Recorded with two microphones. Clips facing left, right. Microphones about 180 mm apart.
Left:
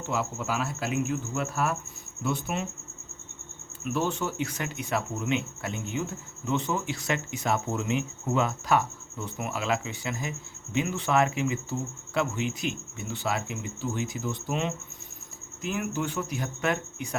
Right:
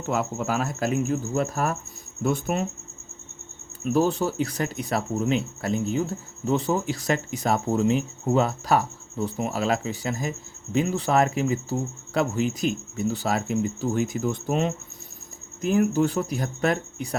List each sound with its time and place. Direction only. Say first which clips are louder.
0.1 s speech: right 5 dB; 50° right (ahead or behind)
3.9 s speech: right 7 dB; 35° right (ahead or behind)